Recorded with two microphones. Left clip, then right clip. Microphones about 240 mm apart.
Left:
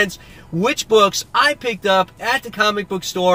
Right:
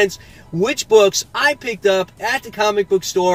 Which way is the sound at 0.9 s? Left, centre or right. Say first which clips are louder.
Right 2 dB; centre.